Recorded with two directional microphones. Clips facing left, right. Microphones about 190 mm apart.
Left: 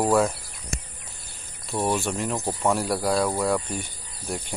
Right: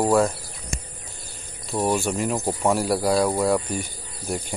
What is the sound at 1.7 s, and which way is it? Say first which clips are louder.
Speech: right 2 dB; 5° right (ahead or behind).